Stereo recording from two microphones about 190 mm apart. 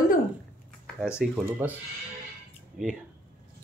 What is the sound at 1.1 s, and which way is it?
Speech, 5° right (ahead or behind).